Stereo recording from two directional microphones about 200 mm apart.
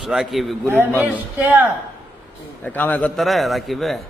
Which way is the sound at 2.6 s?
10° left (ahead or behind).